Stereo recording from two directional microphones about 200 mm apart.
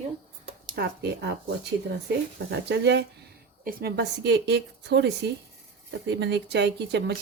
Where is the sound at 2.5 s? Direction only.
60° right (ahead or behind).